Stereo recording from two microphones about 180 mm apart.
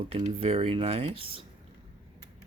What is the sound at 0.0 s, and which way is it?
Speech, 30° right (ahead or behind).